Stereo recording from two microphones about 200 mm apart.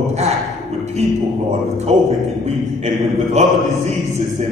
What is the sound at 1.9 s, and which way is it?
Speech, 35° right (ahead or behind).